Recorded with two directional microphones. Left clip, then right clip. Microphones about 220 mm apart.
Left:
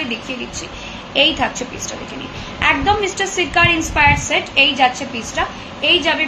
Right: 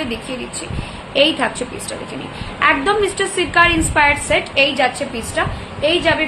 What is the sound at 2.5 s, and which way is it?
A woman's voice, 20° right (ahead or behind).